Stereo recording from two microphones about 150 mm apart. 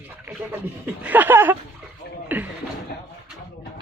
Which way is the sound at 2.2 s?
10° right (ahead or behind).